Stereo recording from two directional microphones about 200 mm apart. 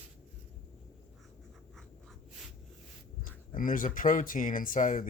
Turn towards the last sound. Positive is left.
turn(degrees=40)  # may be behind; listen again after turning